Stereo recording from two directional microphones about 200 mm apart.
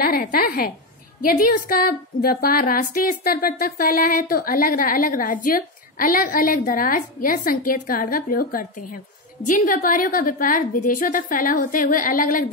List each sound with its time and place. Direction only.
0.0 s speech: 50° left (ahead or behind)